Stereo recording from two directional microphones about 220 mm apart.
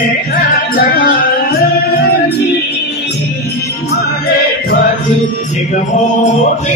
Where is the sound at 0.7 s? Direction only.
40° left (ahead or behind).